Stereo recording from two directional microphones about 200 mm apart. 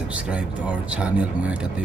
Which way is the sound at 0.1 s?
5° right (ahead or behind).